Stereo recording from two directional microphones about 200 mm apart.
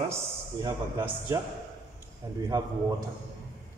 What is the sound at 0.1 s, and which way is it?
A man's voice, 15° right (ahead or behind).